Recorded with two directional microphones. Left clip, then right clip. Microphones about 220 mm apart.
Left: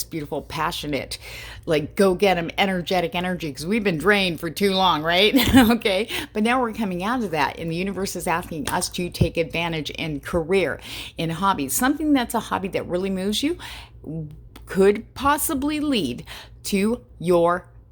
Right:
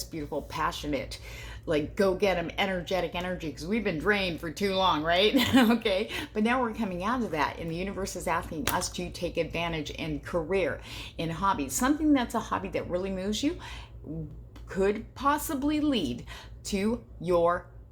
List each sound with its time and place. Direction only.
0.0 s speech: 45° left (ahead or behind)